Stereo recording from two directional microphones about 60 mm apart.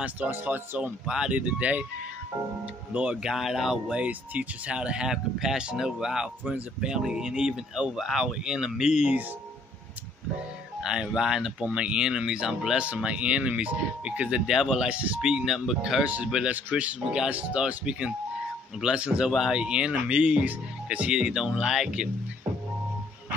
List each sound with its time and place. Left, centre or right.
0.5 s speech: right
1.0 s speech: centre
1.3 s speech: right
2.9 s speech: right
3.3 s speech: centre
3.9 s speech: right
10.8 s speech: centre
14.4 s speech: centre
16.0 s speech: right
17.1 s speech: centre
21.1 s speech: centre